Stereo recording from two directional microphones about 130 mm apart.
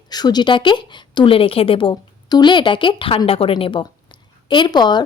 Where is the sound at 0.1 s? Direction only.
30° left (ahead or behind).